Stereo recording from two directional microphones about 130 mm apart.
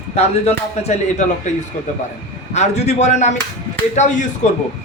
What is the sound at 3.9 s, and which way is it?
Speech, 70° left (ahead or behind).